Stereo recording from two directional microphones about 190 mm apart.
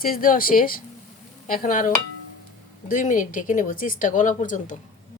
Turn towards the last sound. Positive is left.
turn(degrees=40)  # may be behind; listen again after turning